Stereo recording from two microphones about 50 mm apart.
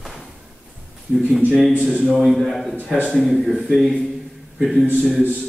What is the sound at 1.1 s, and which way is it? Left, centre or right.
Speech, centre.